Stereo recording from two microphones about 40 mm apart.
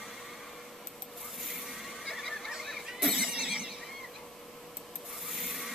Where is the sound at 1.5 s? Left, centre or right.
Centre.